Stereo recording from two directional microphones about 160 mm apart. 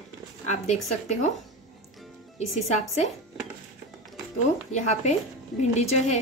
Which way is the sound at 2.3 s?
45° left (ahead or behind).